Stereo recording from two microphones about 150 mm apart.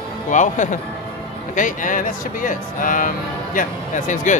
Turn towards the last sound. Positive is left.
turn(degrees=60)  # may be behind; listen again after turning